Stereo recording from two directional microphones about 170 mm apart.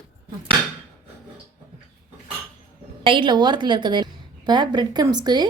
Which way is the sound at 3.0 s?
30° right (ahead or behind).